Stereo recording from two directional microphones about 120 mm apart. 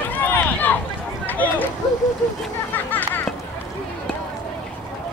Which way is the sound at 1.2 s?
15° left (ahead or behind).